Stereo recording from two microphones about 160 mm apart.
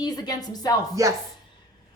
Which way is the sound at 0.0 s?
25° left (ahead or behind).